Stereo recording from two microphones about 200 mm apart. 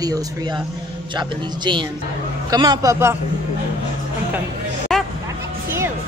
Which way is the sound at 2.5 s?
20° right (ahead or behind).